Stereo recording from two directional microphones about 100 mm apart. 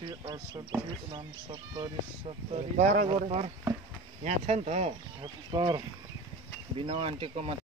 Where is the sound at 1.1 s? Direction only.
50° right (ahead or behind).